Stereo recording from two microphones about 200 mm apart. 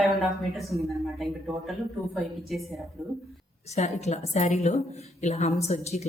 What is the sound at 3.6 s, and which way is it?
A woman's voice, 35° left (ahead or behind).